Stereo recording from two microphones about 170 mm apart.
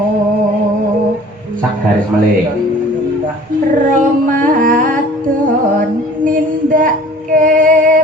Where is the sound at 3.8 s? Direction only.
50° right (ahead or behind).